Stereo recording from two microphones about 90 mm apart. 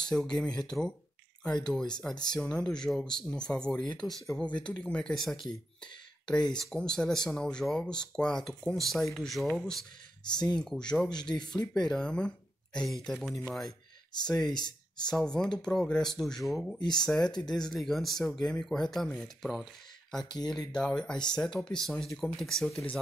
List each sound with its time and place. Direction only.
0.0 s speech: 10° left (ahead or behind)
10.2 s speech: 50° left (ahead or behind)
10.6 s speech: 10° left (ahead or behind)
14.5 s speech: 50° left (ahead or behind)
15.0 s speech: 10° left (ahead or behind)